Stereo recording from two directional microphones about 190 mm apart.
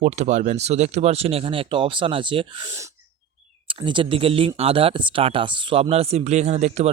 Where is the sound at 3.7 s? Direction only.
25° right (ahead or behind).